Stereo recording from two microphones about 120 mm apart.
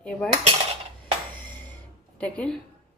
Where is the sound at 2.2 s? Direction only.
10° left (ahead or behind).